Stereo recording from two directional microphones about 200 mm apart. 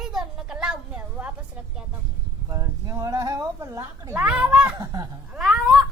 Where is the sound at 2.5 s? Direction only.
15° right (ahead or behind).